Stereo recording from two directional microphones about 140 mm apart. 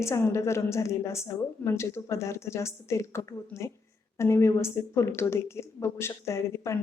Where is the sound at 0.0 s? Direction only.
20° left (ahead or behind).